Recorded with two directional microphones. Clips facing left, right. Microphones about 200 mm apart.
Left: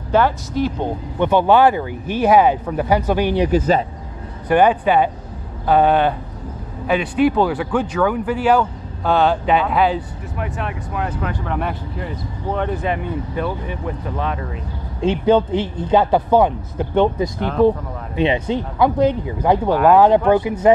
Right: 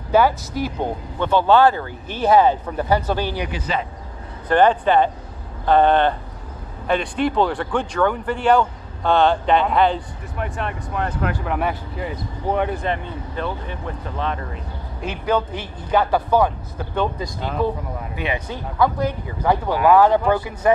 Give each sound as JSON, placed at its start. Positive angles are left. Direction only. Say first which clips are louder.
{"t": 0.1, "sound": "speech", "louder": "even", "side_deg": -5}
{"t": 1.2, "sound": "speech", "louder": "left 2 dB", "side_deg": 15}
{"t": 3.3, "sound": "speech", "louder": "left 9 dB", "side_deg": 40}
{"t": 4.5, "sound": "speech", "louder": "left 1 dB", "side_deg": 10}
{"t": 11.3, "sound": "speech", "louder": "even", "side_deg": -5}
{"t": 12.7, "sound": "speech", "louder": "left 3 dB", "side_deg": 5}
{"t": 15.0, "sound": "speech", "louder": "left 7 dB", "side_deg": 25}